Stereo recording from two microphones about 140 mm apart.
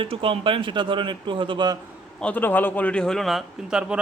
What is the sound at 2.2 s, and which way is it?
A man's voice, 10° left (ahead or behind).